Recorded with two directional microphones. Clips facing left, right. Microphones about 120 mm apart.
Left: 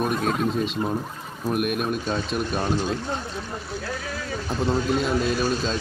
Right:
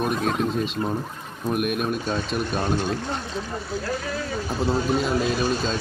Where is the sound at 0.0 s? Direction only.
Centre (ahead or behind).